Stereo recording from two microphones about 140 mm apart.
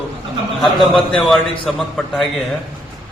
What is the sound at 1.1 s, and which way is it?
A man's voice, centre (ahead or behind).